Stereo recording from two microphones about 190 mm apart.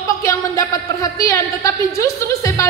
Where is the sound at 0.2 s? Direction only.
15° left (ahead or behind).